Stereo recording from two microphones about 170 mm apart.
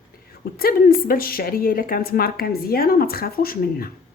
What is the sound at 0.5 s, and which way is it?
A woman's voice, 60° left (ahead or behind).